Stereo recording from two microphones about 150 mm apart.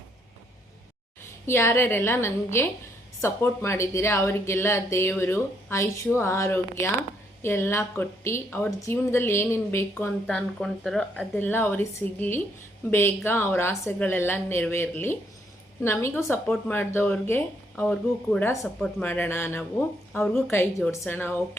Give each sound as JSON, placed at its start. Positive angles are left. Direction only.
{"t": 1.2, "sound": "a woman's voice", "side_deg": 15}
{"t": 10.2, "sound": "a woman's voice", "side_deg": 5}